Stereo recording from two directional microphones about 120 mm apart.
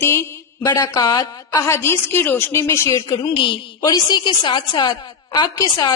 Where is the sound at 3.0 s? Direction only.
40° left (ahead or behind).